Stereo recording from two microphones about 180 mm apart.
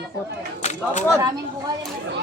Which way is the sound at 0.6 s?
40° left (ahead or behind).